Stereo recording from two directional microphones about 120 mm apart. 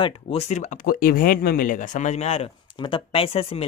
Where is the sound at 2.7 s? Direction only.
40° left (ahead or behind).